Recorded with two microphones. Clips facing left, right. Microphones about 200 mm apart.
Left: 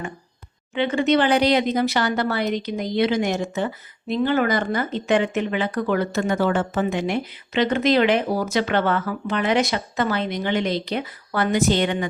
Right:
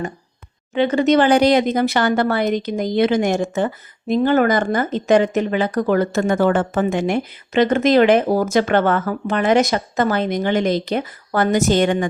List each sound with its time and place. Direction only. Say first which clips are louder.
0.7 s speech: right 4 dB; 40° right (ahead or behind)